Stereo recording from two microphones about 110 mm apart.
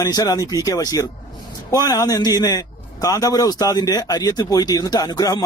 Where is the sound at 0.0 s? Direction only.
35° left (ahead or behind).